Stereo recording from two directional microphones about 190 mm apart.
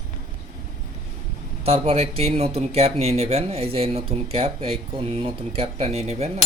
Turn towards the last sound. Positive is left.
turn(degrees=-35)  # may be behind; listen again after turning